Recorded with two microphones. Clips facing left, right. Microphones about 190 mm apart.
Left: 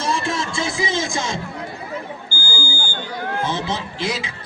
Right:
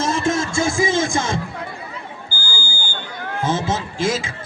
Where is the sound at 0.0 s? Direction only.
45° right (ahead or behind).